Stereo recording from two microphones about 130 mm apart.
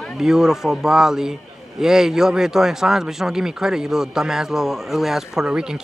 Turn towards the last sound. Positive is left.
turn(degrees=-5)  # may be behind; listen again after turning